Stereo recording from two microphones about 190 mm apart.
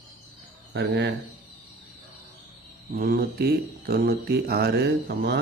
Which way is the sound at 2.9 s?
50° right (ahead or behind).